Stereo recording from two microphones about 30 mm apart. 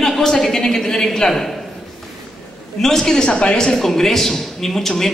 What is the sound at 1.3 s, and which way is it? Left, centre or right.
Speech, centre.